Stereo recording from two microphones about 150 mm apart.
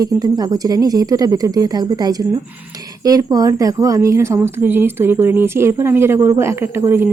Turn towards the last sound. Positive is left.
turn(degrees=-15)  # may be behind; listen again after turning